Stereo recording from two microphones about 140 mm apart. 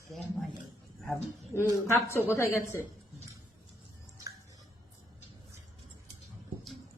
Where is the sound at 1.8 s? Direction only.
20° left (ahead or behind).